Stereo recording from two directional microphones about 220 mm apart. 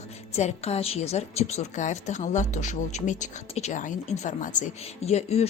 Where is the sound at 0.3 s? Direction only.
30° left (ahead or behind).